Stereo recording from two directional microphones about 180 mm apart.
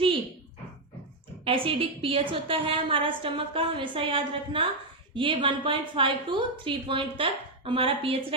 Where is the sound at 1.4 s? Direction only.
30° right (ahead or behind).